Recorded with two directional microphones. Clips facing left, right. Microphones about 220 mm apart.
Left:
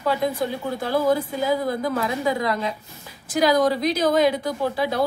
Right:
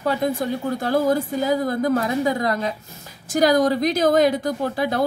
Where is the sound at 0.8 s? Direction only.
45° right (ahead or behind).